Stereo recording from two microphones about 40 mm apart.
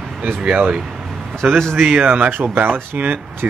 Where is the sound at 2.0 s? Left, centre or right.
Right.